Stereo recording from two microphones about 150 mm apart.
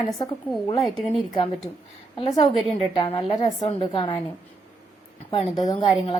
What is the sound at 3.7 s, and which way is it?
Speech, 35° left (ahead or behind).